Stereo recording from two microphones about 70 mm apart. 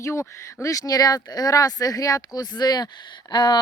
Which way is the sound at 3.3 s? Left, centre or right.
Left.